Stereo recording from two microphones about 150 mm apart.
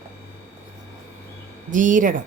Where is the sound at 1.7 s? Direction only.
60° right (ahead or behind).